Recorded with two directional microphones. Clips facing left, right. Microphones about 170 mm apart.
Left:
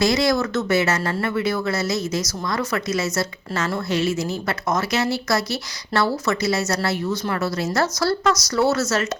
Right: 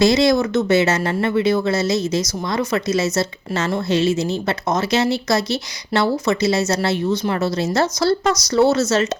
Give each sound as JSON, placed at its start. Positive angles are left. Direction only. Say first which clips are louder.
{"t": 0.0, "sound": "speech", "louder": "right 4 dB", "side_deg": -25}